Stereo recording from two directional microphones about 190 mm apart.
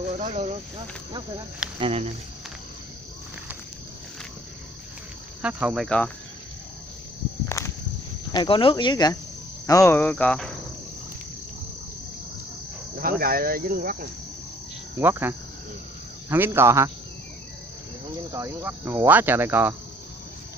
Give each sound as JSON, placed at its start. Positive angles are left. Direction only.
{"t": 0.2, "sound": "speech", "side_deg": -35}
{"t": 1.8, "sound": "speech", "side_deg": -30}
{"t": 5.4, "sound": "cricket", "side_deg": -5}
{"t": 5.9, "sound": "cricket", "side_deg": 5}
{"t": 7.4, "sound": "walk", "side_deg": 15}
{"t": 8.3, "sound": "speech", "side_deg": 25}
{"t": 9.7, "sound": "cricket", "side_deg": 15}
{"t": 12.9, "sound": "cricket", "side_deg": -50}
{"t": 15.0, "sound": "cricket", "side_deg": -10}
{"t": 18.3, "sound": "cricket", "side_deg": -15}